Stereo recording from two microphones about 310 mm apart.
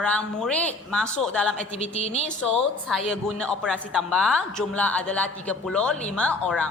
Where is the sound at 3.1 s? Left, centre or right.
Centre.